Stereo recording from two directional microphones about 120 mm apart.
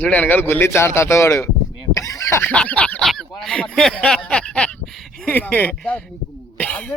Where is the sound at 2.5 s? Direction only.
10° left (ahead or behind).